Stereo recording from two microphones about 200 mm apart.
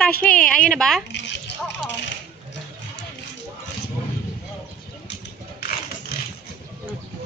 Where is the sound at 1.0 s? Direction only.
60° left (ahead or behind).